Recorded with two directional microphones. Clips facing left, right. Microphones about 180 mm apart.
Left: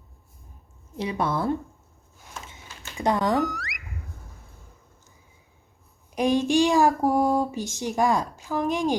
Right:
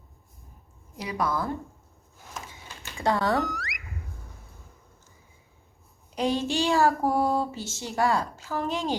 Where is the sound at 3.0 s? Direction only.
20° left (ahead or behind).